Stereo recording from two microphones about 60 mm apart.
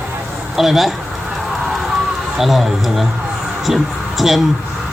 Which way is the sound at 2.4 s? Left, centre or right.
Centre.